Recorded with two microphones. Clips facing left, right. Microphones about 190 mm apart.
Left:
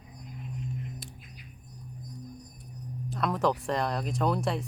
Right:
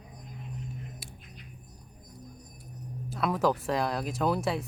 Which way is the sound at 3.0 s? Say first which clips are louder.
Right 1 dB; 5° right (ahead or behind).